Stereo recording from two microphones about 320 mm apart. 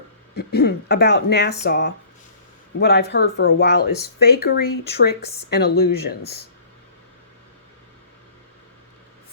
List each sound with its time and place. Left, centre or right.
0.3 s speech: left